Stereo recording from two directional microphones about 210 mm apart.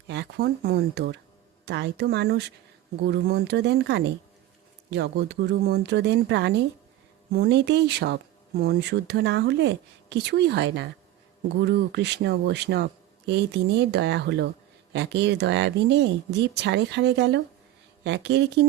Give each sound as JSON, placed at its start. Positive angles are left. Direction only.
{"t": 0.1, "sound": "speech", "side_deg": -55}